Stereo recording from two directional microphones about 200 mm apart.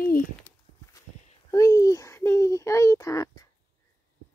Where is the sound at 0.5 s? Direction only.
5° left (ahead or behind).